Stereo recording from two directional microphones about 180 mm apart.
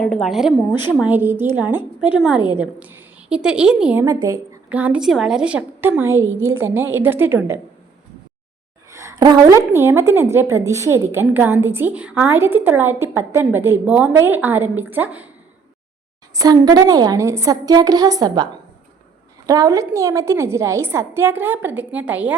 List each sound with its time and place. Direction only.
0.0 s a woman's voice: centre (ahead or behind)
4.0 s a woman's voice: 20° right (ahead or behind)
4.7 s a woman's voice: 5° right (ahead or behind)
8.9 s a woman's voice: 15° right (ahead or behind)
16.3 s a woman's voice: 20° right (ahead or behind)
19.5 s a woman's voice: 20° right (ahead or behind)